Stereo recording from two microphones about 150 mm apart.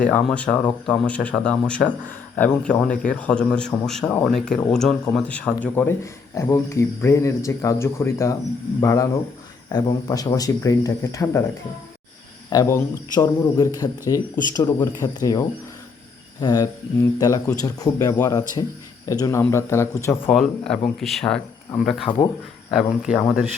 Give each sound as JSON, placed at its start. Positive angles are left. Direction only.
{"t": 0.0, "sound": "speech", "side_deg": 10}
{"t": 12.5, "sound": "speech", "side_deg": 20}
{"t": 20.3, "sound": "speech", "side_deg": 0}
{"t": 23.0, "sound": "speech", "side_deg": -5}